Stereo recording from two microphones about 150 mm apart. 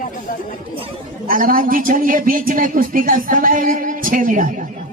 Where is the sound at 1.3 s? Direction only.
70° right (ahead or behind).